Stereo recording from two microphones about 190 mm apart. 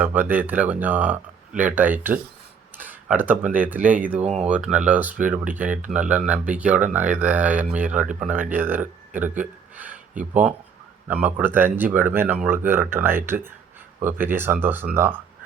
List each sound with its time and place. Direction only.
0.0 s speech: 10° right (ahead or behind)
4.2 s speech: 35° right (ahead or behind)
4.4 s speech: 5° right (ahead or behind)
11.1 s speech: 5° right (ahead or behind)